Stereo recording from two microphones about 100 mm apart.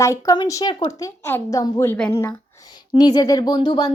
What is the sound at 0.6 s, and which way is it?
Speech, 50° left (ahead or behind).